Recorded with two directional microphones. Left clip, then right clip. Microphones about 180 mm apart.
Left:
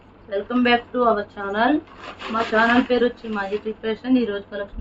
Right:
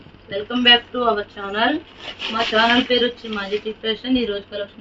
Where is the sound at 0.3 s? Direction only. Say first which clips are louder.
Right 4 dB; 10° left (ahead or behind).